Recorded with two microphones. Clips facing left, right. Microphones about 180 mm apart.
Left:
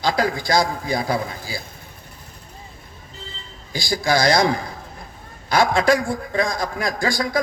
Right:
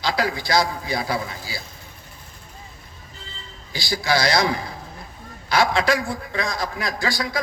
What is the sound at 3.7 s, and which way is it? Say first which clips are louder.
A man's voice: left 2 dB; 50° left (ahead or behind).